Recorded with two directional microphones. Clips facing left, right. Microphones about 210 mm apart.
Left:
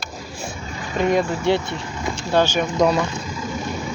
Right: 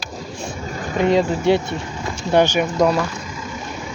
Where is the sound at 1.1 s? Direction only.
20° right (ahead or behind).